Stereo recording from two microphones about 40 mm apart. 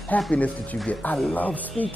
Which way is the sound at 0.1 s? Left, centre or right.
Left.